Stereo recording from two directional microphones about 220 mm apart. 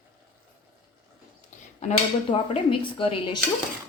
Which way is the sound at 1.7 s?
25° left (ahead or behind).